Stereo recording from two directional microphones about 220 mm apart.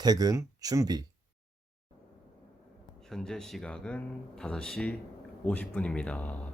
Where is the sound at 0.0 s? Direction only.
15° right (ahead or behind).